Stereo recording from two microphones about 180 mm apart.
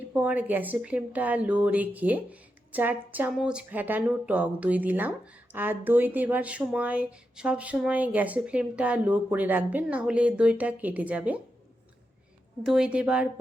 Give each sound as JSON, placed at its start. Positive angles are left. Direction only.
{"t": 0.1, "sound": "a woman's voice", "side_deg": -10}
{"t": 12.6, "sound": "speech", "side_deg": -5}